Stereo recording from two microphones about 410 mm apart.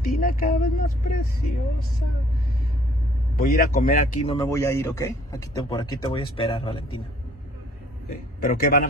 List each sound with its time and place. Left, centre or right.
0.0 s speech: left
3.3 s speech: left
4.4 s a man's voice: centre
8.1 s speech: left